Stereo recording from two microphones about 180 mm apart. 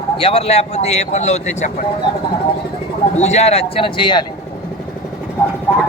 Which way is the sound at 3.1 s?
40° left (ahead or behind).